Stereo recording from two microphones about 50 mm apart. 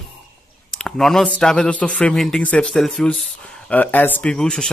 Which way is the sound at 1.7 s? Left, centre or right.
Left.